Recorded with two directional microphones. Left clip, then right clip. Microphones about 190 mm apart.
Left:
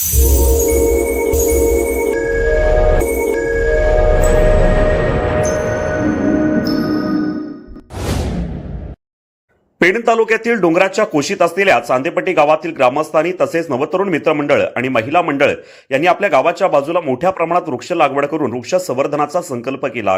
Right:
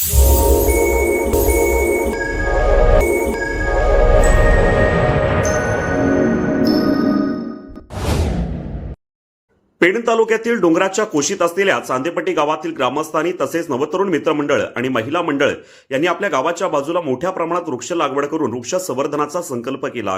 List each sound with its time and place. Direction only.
0.8 s music: centre (ahead or behind)
9.8 s a man's voice: 20° left (ahead or behind)